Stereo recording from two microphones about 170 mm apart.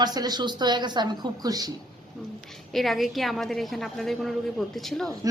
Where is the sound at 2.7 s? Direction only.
Centre (ahead or behind).